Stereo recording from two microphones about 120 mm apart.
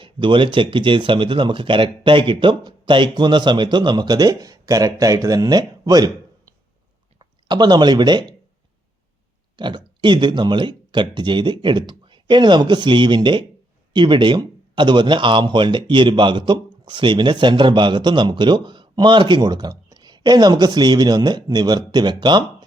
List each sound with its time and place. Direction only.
0.0 s speech: 45° right (ahead or behind)
7.2 s speech: 35° right (ahead or behind)
9.6 s speech: 40° right (ahead or behind)